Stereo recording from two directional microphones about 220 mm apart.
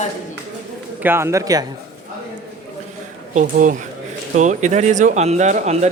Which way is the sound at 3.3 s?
35° right (ahead or behind).